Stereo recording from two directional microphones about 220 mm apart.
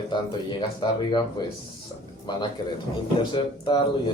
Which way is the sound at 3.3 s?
20° left (ahead or behind).